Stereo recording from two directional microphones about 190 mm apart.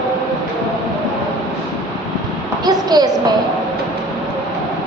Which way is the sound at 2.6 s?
20° right (ahead or behind).